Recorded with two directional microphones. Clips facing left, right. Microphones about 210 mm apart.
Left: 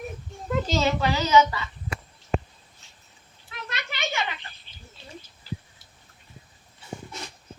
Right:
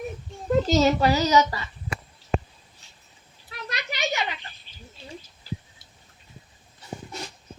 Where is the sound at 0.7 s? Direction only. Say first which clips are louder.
Right 4 dB; 40° right (ahead or behind).